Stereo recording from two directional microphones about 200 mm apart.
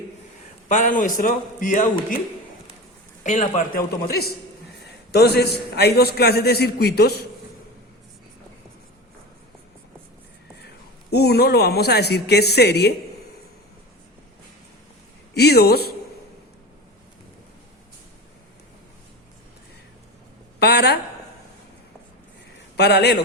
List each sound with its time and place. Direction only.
0.7 s a man's voice: 40° left (ahead or behind)
3.2 s a man's voice: 35° left (ahead or behind)
5.1 s a man's voice: 55° left (ahead or behind)
11.1 s a man's voice: 55° left (ahead or behind)
15.4 s a man's voice: 55° left (ahead or behind)
20.6 s a woman's voice: 55° left (ahead or behind)
22.8 s a man's voice: 55° left (ahead or behind)